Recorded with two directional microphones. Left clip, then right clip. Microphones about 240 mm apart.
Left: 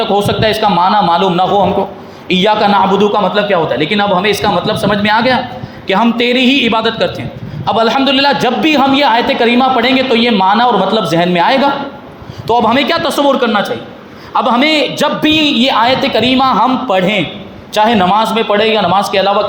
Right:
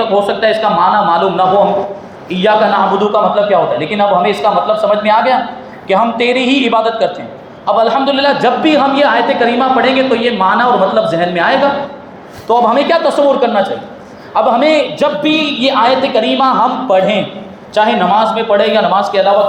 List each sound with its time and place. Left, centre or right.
0.3 s a man's voice: left